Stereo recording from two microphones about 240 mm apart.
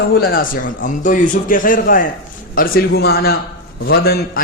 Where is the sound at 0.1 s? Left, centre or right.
Left.